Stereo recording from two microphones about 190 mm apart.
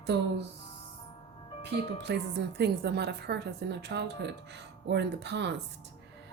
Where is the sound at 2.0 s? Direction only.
65° right (ahead or behind).